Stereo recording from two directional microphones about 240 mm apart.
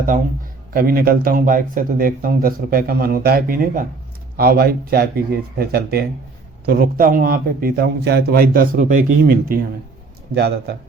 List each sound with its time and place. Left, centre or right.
0.7 s a man's voice: right